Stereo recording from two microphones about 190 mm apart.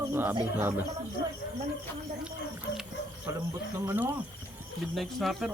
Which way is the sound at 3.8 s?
10° right (ahead or behind).